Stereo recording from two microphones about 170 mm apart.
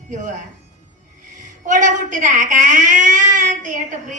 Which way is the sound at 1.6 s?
45° right (ahead or behind).